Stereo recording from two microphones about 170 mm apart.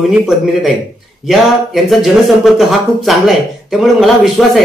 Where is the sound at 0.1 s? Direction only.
Centre (ahead or behind).